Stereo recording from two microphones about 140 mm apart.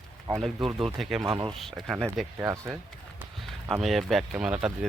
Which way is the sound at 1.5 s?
Centre (ahead or behind).